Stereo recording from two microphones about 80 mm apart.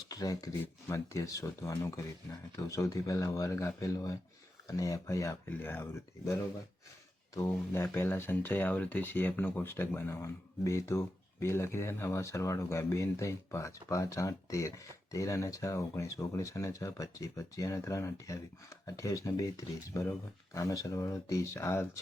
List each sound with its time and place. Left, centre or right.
0.1 s speech: left
0.6 s speech: left
5.5 s speech: left
7.3 s speech: left